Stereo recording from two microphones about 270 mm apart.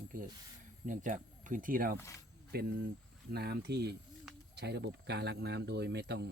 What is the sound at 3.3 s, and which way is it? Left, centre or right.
Speech, right.